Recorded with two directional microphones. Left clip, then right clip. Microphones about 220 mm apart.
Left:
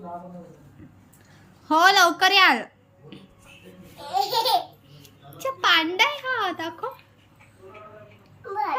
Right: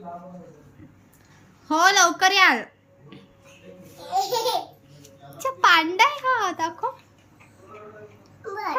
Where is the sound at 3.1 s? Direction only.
Centre (ahead or behind).